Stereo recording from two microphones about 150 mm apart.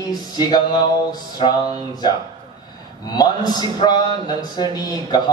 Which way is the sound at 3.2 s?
25° left (ahead or behind).